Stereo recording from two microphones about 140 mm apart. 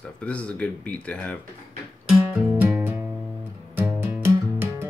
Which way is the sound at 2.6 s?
10° right (ahead or behind).